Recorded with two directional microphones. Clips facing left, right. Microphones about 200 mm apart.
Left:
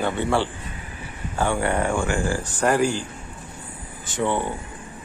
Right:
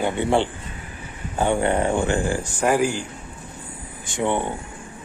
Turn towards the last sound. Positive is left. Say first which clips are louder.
# right 1 dB
turn(degrees=-20)  # may be behind; listen again after turning